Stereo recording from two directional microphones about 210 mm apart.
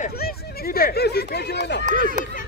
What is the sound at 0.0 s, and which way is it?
Speech, 45° left (ahead or behind).